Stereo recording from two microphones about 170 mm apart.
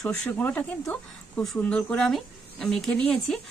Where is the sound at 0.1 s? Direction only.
10° left (ahead or behind).